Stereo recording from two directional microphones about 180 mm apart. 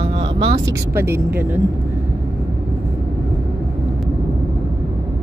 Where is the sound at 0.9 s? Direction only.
15° right (ahead or behind).